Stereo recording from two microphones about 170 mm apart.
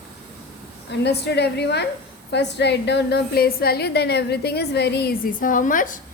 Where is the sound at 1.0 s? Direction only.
80° left.